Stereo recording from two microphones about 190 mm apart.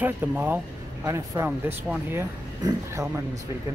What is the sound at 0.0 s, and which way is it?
Speech, 10° right (ahead or behind).